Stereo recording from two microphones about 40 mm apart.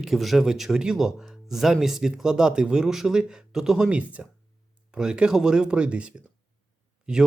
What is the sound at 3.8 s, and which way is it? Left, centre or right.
Speech, right.